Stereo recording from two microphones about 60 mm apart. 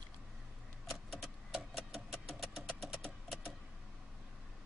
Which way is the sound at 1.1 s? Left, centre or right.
Centre.